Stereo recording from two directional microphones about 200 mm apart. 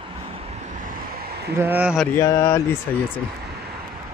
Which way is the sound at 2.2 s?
15° left (ahead or behind).